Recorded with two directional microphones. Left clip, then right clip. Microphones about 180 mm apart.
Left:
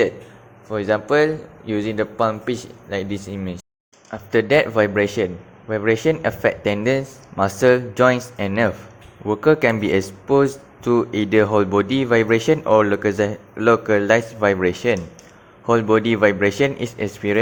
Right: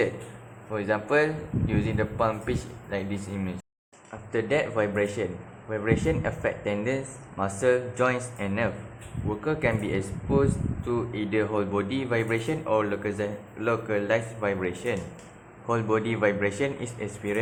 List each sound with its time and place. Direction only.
0.7 s speech: 35° left (ahead or behind)